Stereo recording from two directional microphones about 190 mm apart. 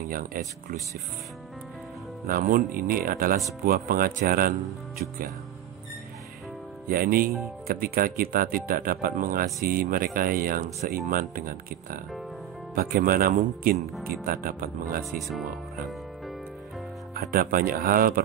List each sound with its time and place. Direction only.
0.1 s speech: 45° right (ahead or behind)
2.2 s speech: 45° right (ahead or behind)
6.9 s speech: 50° right (ahead or behind)
15.0 s speech: centre (ahead or behind)
17.1 s speech: 50° right (ahead or behind)